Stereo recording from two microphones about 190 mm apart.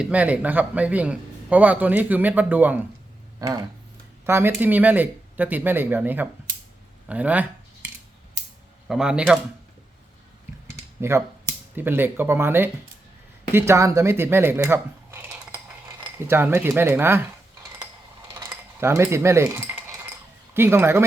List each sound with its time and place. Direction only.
0.0 s speech: 5° right (ahead or behind)
8.9 s speech: 5° right (ahead or behind)
11.0 s speech: 15° right (ahead or behind)
18.3 s cutlery: 15° right (ahead or behind)
20.5 s speech: 10° right (ahead or behind)